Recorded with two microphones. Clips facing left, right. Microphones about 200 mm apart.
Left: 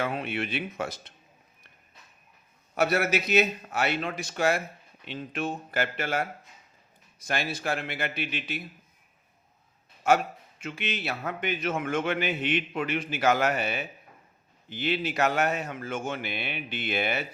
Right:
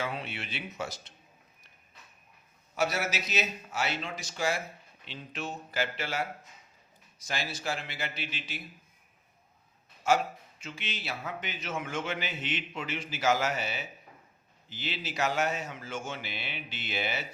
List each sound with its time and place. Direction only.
0.0 s a man's voice: 55° left (ahead or behind)
2.7 s a man's voice: 55° left (ahead or behind)
10.0 s a man's voice: 60° left (ahead or behind)